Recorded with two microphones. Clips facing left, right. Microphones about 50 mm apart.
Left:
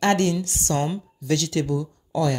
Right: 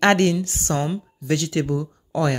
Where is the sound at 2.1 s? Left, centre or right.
Right.